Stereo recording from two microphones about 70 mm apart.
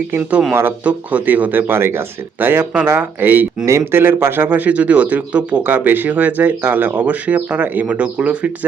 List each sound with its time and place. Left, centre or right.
0.2 s speech: centre